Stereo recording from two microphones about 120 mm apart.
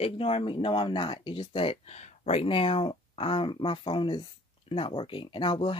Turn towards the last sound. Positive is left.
turn(degrees=45)  # may be behind; listen again after turning